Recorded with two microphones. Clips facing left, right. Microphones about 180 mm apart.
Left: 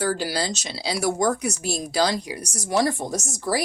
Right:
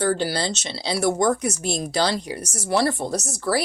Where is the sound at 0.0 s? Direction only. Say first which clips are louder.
Right 2 dB; 10° left (ahead or behind).